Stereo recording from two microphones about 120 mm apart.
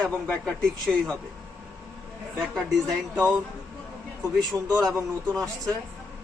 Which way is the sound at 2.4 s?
Centre (ahead or behind).